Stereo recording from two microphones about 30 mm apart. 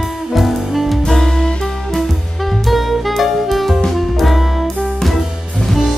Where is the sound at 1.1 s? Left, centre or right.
Centre.